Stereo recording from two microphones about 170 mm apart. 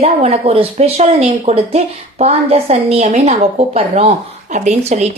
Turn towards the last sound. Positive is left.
turn(degrees=-40)  # may be behind; listen again after turning